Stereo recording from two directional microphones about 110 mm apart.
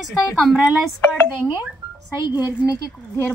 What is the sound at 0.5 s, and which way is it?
Speech, 15° right (ahead or behind).